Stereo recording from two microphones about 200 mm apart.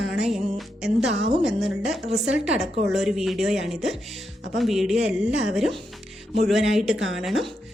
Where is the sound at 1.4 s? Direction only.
Centre (ahead or behind).